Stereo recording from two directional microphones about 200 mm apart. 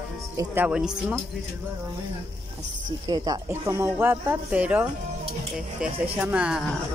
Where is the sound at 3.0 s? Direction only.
20° right (ahead or behind).